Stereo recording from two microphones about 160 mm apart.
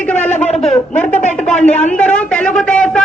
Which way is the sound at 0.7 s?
5° left (ahead or behind).